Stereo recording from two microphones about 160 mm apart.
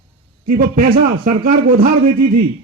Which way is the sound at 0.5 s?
65° right (ahead or behind).